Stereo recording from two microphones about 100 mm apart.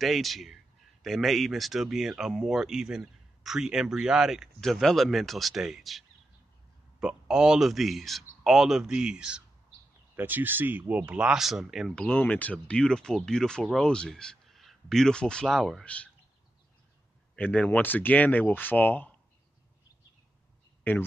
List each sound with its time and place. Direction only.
0.0 s speech: centre (ahead or behind)
10.1 s speech: 20° right (ahead or behind); by 11.9 s 5° right (ahead or behind)
11.9 s speech: 10° left (ahead or behind)
17.4 s speech: 15° left (ahead or behind)